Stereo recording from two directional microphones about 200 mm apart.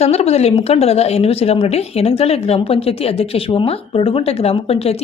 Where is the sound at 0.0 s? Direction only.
30° left (ahead or behind).